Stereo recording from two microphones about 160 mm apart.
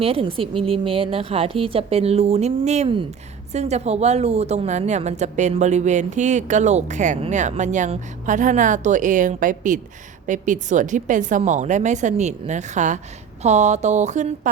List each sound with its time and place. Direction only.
0.0 s a woman's voice: 35° right (ahead or behind)